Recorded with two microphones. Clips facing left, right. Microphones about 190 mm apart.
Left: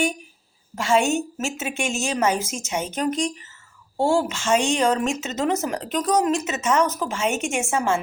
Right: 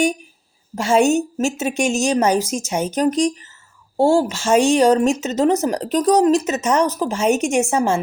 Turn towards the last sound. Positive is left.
turn(degrees=-40)  # may be behind; listen again after turning